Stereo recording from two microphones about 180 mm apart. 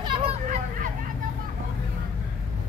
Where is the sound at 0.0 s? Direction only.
30° right (ahead or behind).